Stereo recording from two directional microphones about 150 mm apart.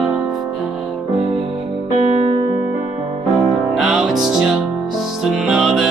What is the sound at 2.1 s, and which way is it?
Music, 45° right (ahead or behind).